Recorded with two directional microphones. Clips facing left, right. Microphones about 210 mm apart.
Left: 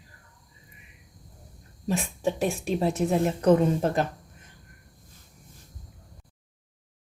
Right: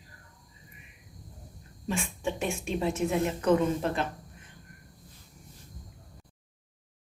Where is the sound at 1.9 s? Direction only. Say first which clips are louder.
Left 5 dB; 40° left (ahead or behind).